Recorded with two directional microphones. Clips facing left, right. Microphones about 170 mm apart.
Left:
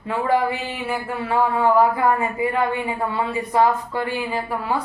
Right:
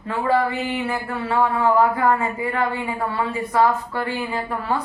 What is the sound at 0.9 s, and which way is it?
A woman's voice, 15° left (ahead or behind).